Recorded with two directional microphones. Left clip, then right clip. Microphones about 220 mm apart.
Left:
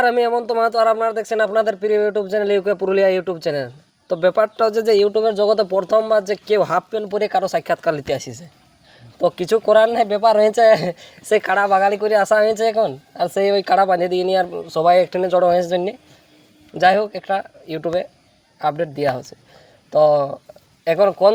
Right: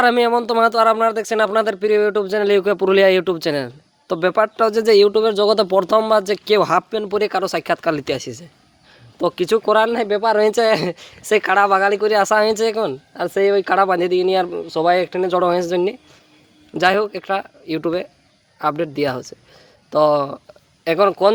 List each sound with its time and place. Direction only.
0.0 s speech: 40° right (ahead or behind)
4.1 s speech: 30° right (ahead or behind)
13.3 s speech: 15° right (ahead or behind)
13.8 s speech: 30° right (ahead or behind)
14.1 s speech: 15° right (ahead or behind)
14.3 s speech: 25° right (ahead or behind)